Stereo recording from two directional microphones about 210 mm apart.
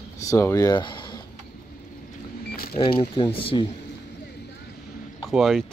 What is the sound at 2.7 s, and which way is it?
Speech, 25° left (ahead or behind).